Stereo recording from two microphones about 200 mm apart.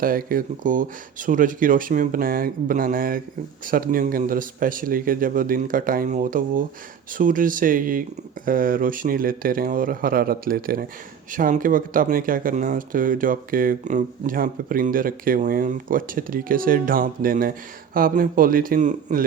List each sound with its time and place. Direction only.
0.0 s speech: 45° right (ahead or behind)